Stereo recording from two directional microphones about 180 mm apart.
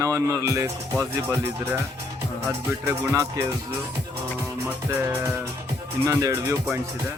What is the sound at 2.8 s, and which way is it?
Speech, 15° right (ahead or behind).